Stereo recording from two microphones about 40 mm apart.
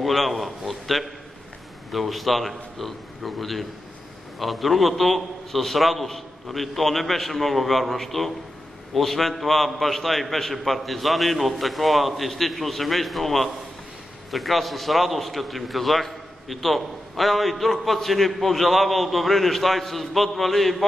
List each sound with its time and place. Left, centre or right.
0.0 s a man's voice: centre